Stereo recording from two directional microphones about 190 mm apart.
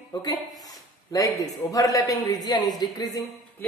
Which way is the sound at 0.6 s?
20° left (ahead or behind).